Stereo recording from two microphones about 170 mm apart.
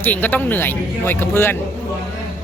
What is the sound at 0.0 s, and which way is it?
Speech, 10° left (ahead or behind).